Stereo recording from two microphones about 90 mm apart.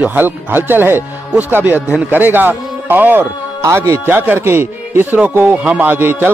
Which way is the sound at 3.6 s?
35° right (ahead or behind).